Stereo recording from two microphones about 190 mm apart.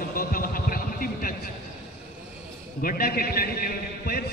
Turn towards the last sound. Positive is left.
turn(degrees=50)  # may be behind; listen again after turning